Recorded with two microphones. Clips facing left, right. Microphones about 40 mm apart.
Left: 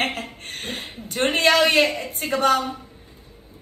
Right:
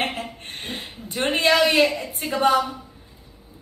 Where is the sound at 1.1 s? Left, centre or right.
Centre.